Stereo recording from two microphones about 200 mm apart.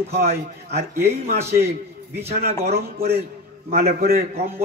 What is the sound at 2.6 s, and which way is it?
Speech, 50° right (ahead or behind).